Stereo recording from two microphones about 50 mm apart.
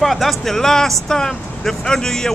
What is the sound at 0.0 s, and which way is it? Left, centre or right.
Speech, centre.